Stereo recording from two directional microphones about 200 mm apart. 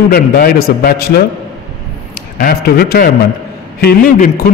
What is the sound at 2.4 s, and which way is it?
A man's voice, 50° left (ahead or behind).